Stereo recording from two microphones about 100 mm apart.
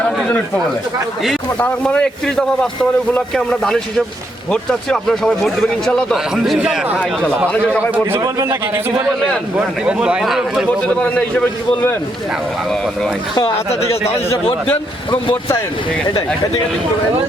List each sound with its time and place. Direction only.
1.5 s a man's voice: 15° left (ahead or behind); by 6.8 s 5° right (ahead or behind)
7.4 s a man's voice: 15° left (ahead or behind)
7.9 s speech: 20° right (ahead or behind)
8.2 s a man's voice: 30° right (ahead or behind)
9.6 s speech: 10° right (ahead or behind)
10.8 s a man's voice: 10° left (ahead or behind)
13.7 s a man's voice: 90° left